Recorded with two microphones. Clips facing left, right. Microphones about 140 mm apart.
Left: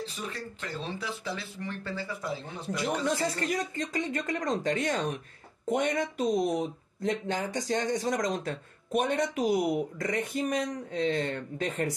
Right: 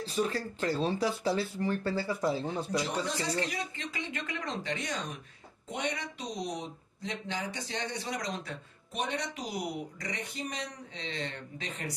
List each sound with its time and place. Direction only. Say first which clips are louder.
0.0 s speech: right 6 dB; 35° right (ahead or behind)
3.1 s speech: left 4 dB; 50° left (ahead or behind)